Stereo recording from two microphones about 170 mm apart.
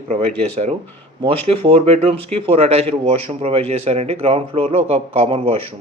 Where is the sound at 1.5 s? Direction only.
35° right (ahead or behind).